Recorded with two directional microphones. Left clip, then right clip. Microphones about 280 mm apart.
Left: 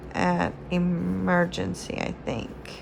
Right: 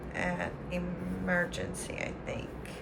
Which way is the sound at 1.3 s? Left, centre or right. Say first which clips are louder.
Left 7 dB; centre.